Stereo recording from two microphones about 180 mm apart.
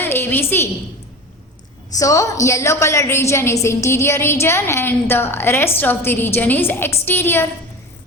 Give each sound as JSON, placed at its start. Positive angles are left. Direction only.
{"t": 0.0, "sound": "a woman's voice", "side_deg": 10}
{"t": 1.9, "sound": "a woman's voice", "side_deg": 20}